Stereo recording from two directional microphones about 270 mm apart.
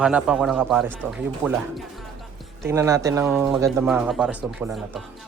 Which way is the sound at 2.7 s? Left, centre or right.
Centre.